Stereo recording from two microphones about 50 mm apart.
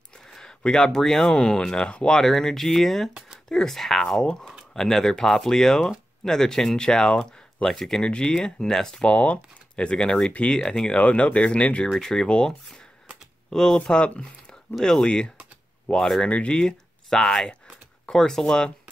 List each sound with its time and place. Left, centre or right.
0.3 s speech: centre
4.2 s speech: centre
9.0 s speech: left
11.9 s speech: centre
13.7 s speech: left
17.1 s speech: centre